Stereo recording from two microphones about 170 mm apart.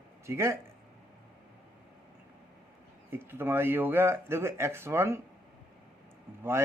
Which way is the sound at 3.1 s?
15° right (ahead or behind).